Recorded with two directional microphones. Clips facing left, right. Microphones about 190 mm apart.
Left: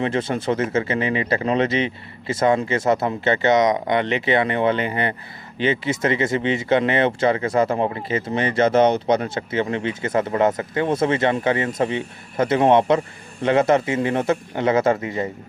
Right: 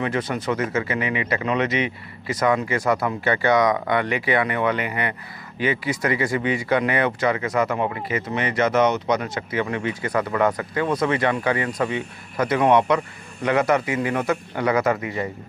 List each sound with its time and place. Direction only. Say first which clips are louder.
0.0 s speech: left 2 dB; 25° left (ahead or behind)